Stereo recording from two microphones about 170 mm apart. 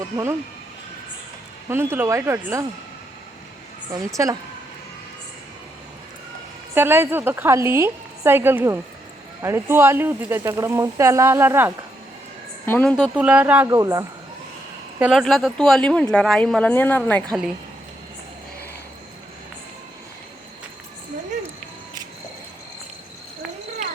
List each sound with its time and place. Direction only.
1.7 s speech: 15° right (ahead or behind)
3.9 s a woman's voice: 20° right (ahead or behind)
6.7 s speech: 15° right (ahead or behind)
12.6 s a woman's voice: 10° left (ahead or behind)
13.0 s speech: 10° right (ahead or behind)
13.7 s a woman's voice: 20° right (ahead or behind)
14.9 s a woman's voice: 10° right (ahead or behind); by 17.3 s 10° left (ahead or behind)